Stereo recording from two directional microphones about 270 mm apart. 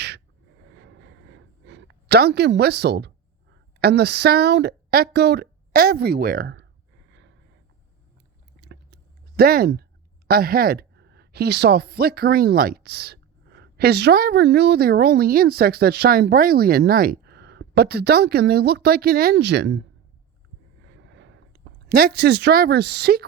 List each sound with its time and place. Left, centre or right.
0.8 s vehicle: right
1.6 s speech: right
7.1 s a sound: right
8.6 s chewing: right
10.2 s speech: right
21.0 s a sound: right
21.8 s speech: right